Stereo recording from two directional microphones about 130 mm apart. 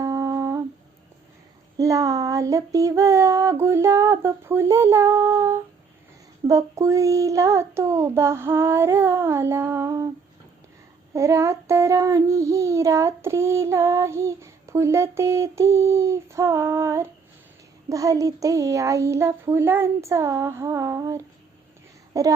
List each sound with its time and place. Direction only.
0.0 s humming: 25° right (ahead or behind)
1.8 s child singing: 25° right (ahead or behind)
11.1 s child singing: 25° right (ahead or behind)